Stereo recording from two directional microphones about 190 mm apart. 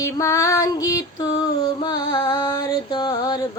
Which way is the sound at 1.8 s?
20° left (ahead or behind).